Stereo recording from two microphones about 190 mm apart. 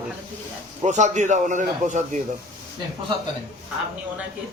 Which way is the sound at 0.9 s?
40° right (ahead or behind).